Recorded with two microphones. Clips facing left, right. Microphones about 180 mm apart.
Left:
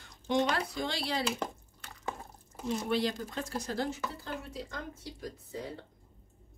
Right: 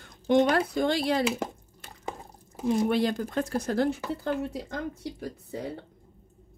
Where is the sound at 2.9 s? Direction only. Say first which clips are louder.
Right 5 dB; 55° right (ahead or behind).